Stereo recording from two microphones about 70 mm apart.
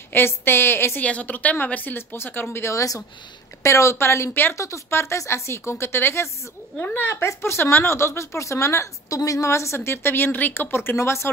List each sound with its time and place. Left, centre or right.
0.1 s speech: left
1.0 s a woman's voice: left
2.7 s speech: left
4.6 s speech: left
6.8 s a woman's voice: left
7.2 s speech: left